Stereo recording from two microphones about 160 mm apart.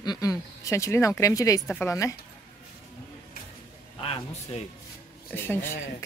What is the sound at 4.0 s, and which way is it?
Speech, 40° left (ahead or behind).